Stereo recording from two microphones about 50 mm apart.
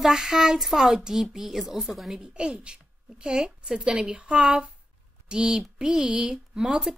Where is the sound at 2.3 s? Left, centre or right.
Right.